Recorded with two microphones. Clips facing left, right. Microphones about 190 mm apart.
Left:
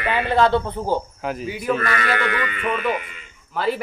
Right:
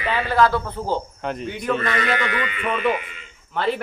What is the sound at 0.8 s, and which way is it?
Speech, 10° left (ahead or behind).